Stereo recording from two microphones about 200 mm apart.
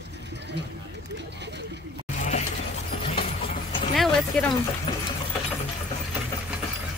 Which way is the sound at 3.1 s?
30° left (ahead or behind).